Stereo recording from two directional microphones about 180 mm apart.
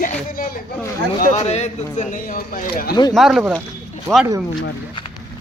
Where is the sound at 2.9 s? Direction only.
25° left (ahead or behind).